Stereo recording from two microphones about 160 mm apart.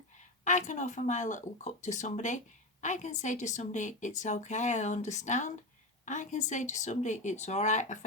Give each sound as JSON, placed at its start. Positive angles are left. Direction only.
{"t": 0.2, "sound": "a woman's voice", "side_deg": 50}